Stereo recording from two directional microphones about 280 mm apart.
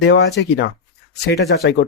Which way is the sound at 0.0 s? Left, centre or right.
Left.